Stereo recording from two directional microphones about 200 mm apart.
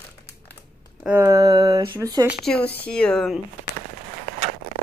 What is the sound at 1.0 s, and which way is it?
Speech, 10° right (ahead or behind).